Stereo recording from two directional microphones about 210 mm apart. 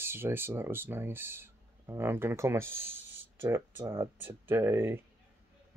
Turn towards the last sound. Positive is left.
turn(degrees=-10)  # may be behind; listen again after turning